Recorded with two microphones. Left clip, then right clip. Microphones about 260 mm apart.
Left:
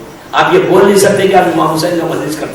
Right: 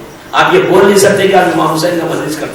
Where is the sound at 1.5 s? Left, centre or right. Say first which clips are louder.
Even; left.